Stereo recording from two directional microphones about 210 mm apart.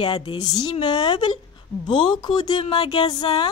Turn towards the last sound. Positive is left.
turn(degrees=20)  # may be behind; listen again after turning